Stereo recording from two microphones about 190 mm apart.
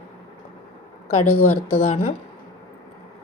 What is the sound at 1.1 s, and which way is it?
A woman's voice, 30° left (ahead or behind).